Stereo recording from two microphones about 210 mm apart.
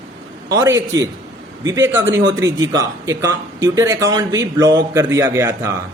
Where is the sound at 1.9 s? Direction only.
10° right (ahead or behind).